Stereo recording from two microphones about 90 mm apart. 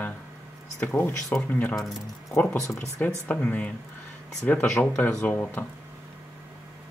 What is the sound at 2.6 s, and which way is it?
Speech, 35° left (ahead or behind).